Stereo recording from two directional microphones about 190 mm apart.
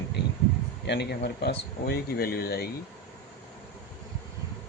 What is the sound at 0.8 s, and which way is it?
Speech, 60° left (ahead or behind).